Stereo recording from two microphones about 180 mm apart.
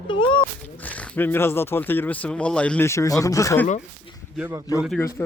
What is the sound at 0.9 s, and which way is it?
Speech, 10° left (ahead or behind).